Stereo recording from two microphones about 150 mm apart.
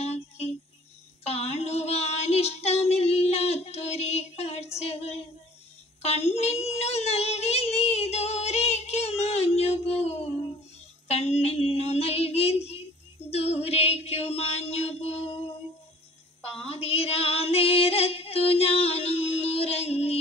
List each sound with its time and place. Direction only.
0.0 s music: 45° left (ahead or behind)
1.2 s child singing: 45° left (ahead or behind)
4.7 s female singing: 45° left (ahead or behind)
6.0 s child singing: 45° left (ahead or behind)
11.1 s mantra: 45° left (ahead or behind)
13.3 s female singing: 45° left (ahead or behind)
16.6 s female singing: 40° left (ahead or behind)